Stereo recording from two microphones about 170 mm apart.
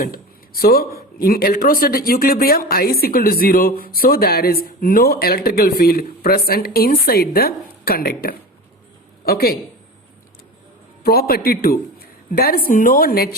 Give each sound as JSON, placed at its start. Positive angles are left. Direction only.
{"t": 0.0, "sound": "speech", "side_deg": 60}
{"t": 11.0, "sound": "a woman's voice", "side_deg": 65}